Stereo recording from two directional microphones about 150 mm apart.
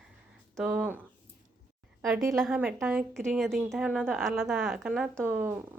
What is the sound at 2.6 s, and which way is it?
Speech, 15° right (ahead or behind).